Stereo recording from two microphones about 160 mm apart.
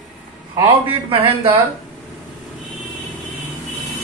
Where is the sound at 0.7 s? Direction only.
35° right (ahead or behind).